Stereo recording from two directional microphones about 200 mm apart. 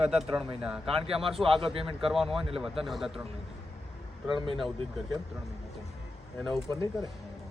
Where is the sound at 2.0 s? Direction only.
Centre (ahead or behind).